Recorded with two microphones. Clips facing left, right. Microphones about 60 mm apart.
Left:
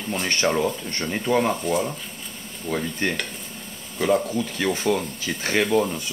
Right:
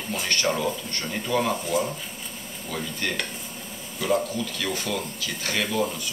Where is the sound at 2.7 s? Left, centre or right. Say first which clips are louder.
Left 6 dB; left.